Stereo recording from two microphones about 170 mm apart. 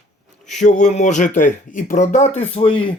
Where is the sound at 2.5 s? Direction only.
35° left (ahead or behind).